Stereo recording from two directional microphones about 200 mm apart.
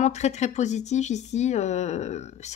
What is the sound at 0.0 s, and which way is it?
Speech, 35° left (ahead or behind).